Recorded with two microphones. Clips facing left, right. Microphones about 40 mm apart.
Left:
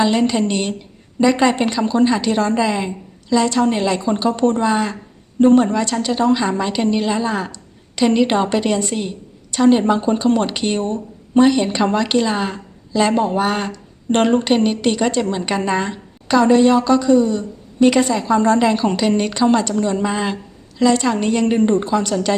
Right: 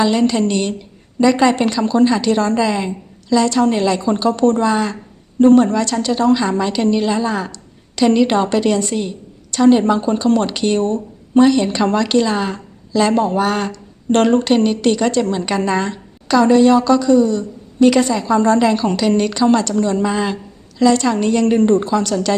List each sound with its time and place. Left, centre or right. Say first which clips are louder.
0.0 s a woman's voice: right 1 dB; centre